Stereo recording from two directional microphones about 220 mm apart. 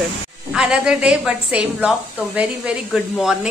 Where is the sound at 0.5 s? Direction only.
5° right (ahead or behind).